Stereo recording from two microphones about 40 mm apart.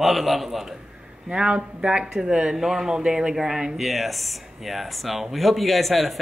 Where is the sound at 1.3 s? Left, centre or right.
Right.